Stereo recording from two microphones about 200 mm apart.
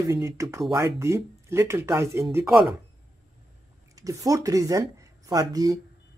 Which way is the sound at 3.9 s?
15° right (ahead or behind).